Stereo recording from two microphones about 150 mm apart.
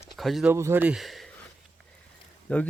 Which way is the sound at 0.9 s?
Centre (ahead or behind).